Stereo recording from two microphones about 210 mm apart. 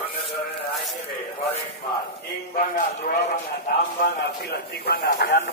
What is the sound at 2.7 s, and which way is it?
Speech, 45° left (ahead or behind).